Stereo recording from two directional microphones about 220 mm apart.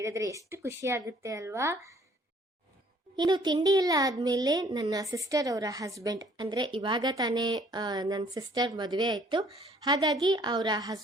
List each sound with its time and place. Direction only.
0.0 s a child's voice: 15° right (ahead or behind)
3.2 s a child's voice: 20° right (ahead or behind)